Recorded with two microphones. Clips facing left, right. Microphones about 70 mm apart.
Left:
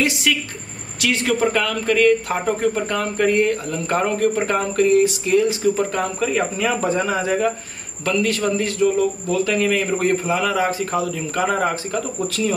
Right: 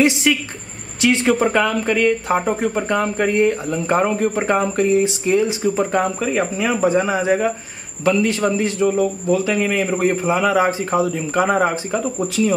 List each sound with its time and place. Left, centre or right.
0.0 s speech: right